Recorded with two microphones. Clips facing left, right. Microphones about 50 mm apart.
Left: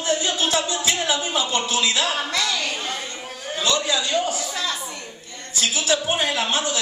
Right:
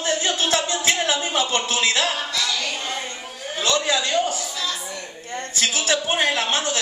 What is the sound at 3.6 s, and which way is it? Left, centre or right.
Speech, right.